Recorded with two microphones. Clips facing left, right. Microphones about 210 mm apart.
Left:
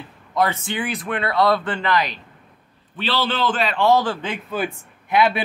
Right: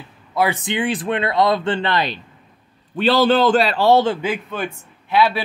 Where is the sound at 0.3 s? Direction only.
10° right (ahead or behind); by 2.1 s 30° right (ahead or behind).